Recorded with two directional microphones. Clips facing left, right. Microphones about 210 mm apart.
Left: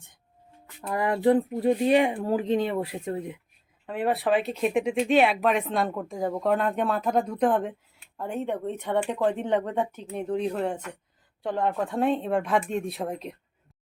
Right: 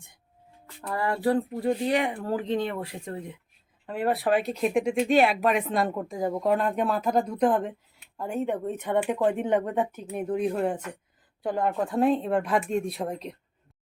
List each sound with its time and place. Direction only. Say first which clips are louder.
0.9 s speech: left 3 dB; 20° left (ahead or behind)
3.8 s speech: even; centre (ahead or behind)